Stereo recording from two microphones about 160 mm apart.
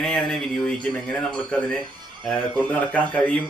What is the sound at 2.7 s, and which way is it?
Speech, 10° left (ahead or behind).